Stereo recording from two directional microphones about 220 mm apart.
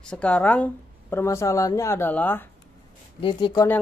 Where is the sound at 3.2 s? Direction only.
20° left (ahead or behind).